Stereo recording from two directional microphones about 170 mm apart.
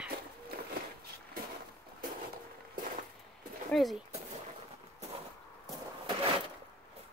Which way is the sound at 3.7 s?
Centre (ahead or behind).